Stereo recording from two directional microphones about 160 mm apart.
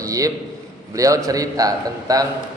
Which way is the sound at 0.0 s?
20° right (ahead or behind).